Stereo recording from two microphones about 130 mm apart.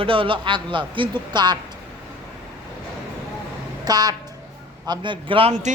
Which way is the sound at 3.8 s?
30° right (ahead or behind).